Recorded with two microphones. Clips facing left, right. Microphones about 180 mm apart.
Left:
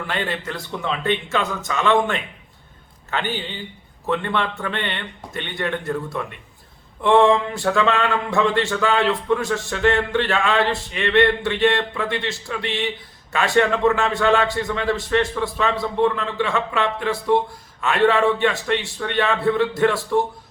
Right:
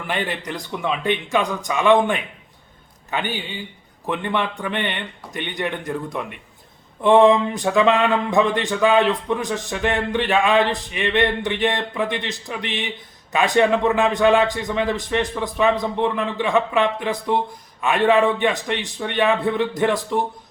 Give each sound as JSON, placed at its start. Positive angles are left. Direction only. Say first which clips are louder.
{"t": 0.1, "sound": "a man's voice", "louder": "right 2 dB", "side_deg": -15}